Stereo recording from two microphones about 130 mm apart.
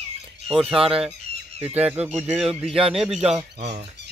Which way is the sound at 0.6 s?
5° right (ahead or behind).